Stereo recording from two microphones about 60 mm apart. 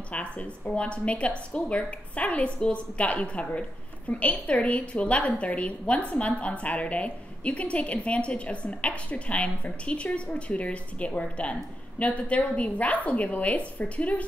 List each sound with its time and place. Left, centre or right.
0.1 s a woman's voice: left